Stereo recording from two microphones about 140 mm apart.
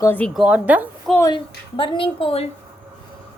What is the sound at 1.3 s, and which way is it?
A woman's voice, 40° left (ahead or behind).